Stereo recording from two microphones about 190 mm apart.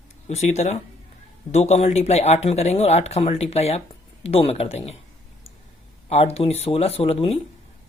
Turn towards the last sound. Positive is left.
turn(degrees=30)  # may be behind; listen again after turning